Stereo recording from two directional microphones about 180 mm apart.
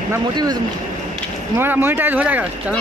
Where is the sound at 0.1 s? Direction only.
20° right (ahead or behind).